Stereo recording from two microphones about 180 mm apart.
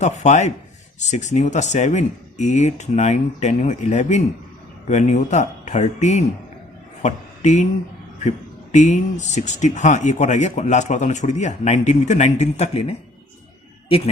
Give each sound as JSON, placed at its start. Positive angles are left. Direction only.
{"t": 0.0, "sound": "speech", "side_deg": 40}
{"t": 8.7, "sound": "speech", "side_deg": 40}